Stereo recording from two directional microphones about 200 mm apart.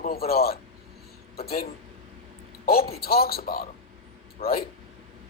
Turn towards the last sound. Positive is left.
turn(degrees=50)  # may be behind; listen again after turning